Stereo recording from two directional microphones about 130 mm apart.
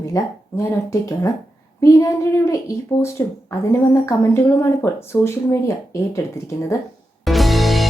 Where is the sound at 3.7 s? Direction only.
25° left (ahead or behind).